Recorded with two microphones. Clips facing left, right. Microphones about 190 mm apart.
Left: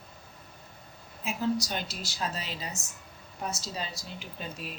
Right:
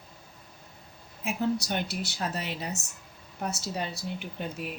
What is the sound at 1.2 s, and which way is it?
Speech, 60° right (ahead or behind).